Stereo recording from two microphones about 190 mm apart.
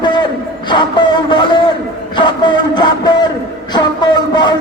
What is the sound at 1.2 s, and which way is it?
A man's voice, 25° left (ahead or behind).